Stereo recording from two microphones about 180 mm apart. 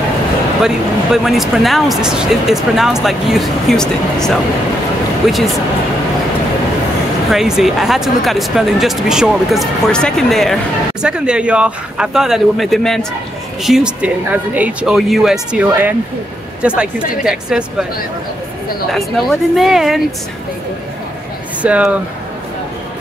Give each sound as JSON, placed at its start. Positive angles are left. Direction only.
{"t": 0.6, "sound": "speech", "side_deg": 0}
{"t": 7.2, "sound": "speech", "side_deg": 0}
{"t": 19.5, "sound": "speech", "side_deg": 0}
{"t": 21.6, "sound": "speech", "side_deg": -5}